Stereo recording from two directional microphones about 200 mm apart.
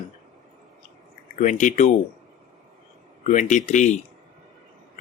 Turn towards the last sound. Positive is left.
turn(degrees=35)  # may be behind; listen again after turning